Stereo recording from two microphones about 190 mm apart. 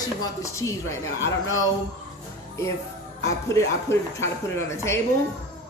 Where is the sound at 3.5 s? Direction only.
15° left (ahead or behind).